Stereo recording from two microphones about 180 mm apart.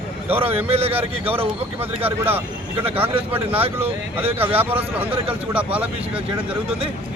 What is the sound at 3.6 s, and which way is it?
Speech, 30° right (ahead or behind).